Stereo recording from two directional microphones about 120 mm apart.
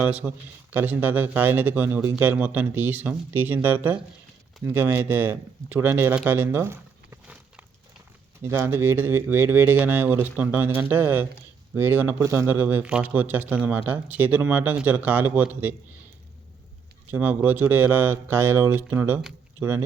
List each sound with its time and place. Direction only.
0.0 s a man's voice: 10° right (ahead or behind)
6.1 s a sound: 15° right (ahead or behind)
8.4 s a man's voice: 20° right (ahead or behind)
17.1 s a man's voice: 15° right (ahead or behind)